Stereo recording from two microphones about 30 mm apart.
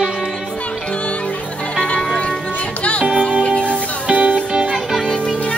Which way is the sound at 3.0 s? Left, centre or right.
Right.